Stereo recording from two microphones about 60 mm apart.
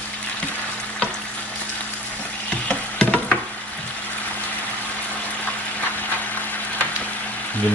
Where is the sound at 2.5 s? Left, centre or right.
Centre.